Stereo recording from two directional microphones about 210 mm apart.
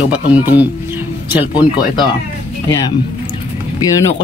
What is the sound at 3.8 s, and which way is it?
Speech, 15° left (ahead or behind).